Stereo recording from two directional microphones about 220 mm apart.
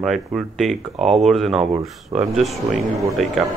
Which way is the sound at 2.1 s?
15° right (ahead or behind).